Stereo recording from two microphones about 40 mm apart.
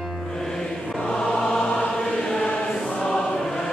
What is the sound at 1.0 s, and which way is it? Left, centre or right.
Choir, left.